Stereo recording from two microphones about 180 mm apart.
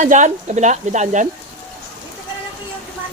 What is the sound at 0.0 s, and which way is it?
Speech, 45° right (ahead or behind).